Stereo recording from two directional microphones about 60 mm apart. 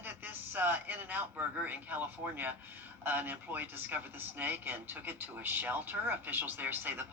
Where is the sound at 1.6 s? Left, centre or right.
Right.